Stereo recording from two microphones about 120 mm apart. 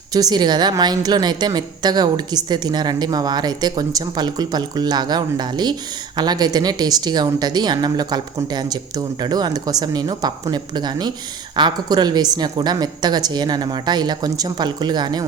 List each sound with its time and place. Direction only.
0.1 s a woman's voice: 35° right (ahead or behind)